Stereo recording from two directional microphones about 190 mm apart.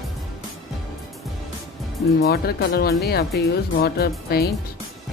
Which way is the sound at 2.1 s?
55° left (ahead or behind).